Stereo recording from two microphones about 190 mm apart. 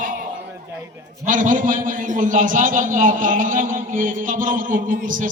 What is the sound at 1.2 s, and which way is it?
A man's voice, 45° right (ahead or behind).